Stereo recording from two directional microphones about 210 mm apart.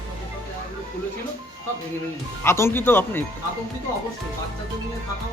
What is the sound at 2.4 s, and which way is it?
Speech, 10° left (ahead or behind).